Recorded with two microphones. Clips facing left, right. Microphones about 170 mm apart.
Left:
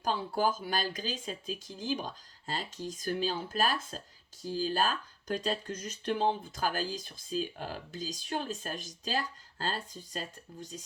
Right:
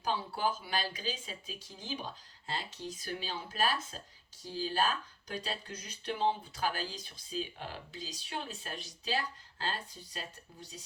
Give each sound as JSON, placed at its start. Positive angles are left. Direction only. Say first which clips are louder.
{"t": 0.0, "sound": "speech", "louder": "left 4 dB", "side_deg": 45}